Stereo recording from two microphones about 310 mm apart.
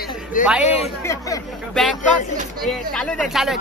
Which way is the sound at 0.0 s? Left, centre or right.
Left.